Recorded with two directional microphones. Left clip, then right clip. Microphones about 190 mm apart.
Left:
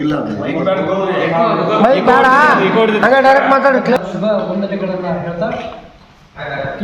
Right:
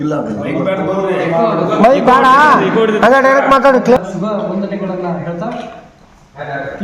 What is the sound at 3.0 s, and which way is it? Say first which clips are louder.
Speech: right 1 dB; 75° right (ahead or behind).